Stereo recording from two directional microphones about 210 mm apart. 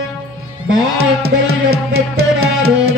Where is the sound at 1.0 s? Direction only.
90° right.